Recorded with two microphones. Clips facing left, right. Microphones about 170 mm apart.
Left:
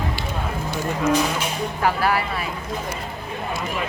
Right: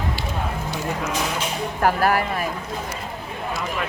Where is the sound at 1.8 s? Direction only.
45° right (ahead or behind).